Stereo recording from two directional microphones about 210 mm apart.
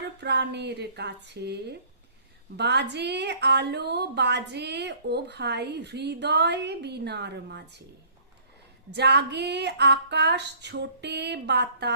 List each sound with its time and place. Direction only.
0.2 s a woman's voice: 55° right (ahead or behind)
8.9 s a woman's voice: 50° right (ahead or behind)